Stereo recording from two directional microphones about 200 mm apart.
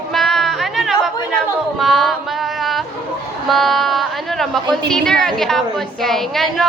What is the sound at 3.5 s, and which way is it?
A woman's voice, centre (ahead or behind).